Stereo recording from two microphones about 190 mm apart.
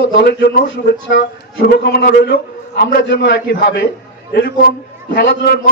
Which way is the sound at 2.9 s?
70° left (ahead or behind).